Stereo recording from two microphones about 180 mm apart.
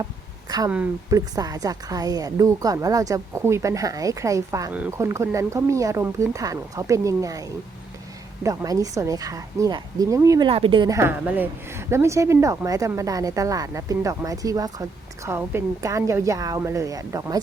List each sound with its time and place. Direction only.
0.0 s a sound: 20° right (ahead or behind)
1.1 s a woman's voice: 20° right (ahead or behind)
8.4 s a woman's voice: 20° right (ahead or behind)
10.5 s a woman's voice: 30° right (ahead or behind)